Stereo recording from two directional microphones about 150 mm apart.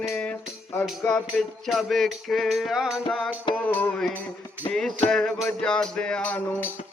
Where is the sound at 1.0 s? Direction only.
5° left (ahead or behind).